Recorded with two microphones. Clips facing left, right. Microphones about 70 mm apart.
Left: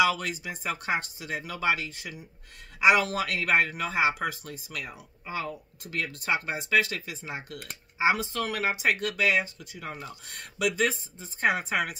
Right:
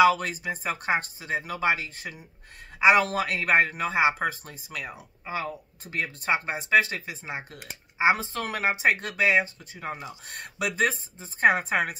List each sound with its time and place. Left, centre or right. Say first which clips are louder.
0.0 s speech: right 5 dB; right